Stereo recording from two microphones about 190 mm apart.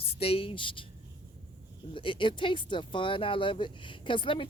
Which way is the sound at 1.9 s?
25° left (ahead or behind).